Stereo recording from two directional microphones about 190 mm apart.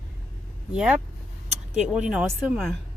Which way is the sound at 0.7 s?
5° right (ahead or behind).